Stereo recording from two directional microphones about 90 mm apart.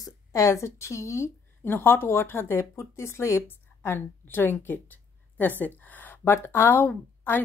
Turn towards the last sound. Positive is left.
turn(degrees=20)  # may be behind; listen again after turning